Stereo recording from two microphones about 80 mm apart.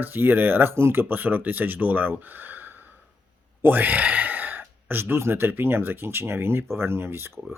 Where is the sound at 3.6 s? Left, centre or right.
Right.